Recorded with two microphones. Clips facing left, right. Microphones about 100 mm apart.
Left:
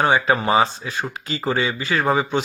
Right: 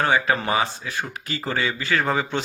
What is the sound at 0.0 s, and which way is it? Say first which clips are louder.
Speech: left 3 dB; 20° left (ahead or behind).